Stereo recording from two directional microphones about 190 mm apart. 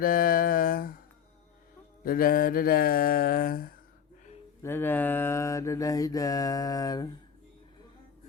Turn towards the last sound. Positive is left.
turn(degrees=20)  # may be behind; listen again after turning